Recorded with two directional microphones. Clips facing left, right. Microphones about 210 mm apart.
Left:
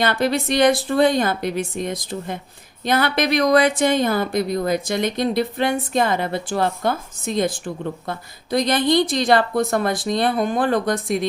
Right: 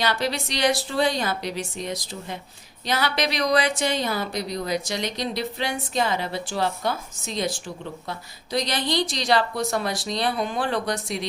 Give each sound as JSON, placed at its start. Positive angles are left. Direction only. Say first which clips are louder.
{"t": 0.0, "sound": "speech", "louder": "left 6 dB", "side_deg": 55}